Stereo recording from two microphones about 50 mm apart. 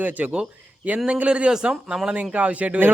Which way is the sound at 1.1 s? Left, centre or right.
Right.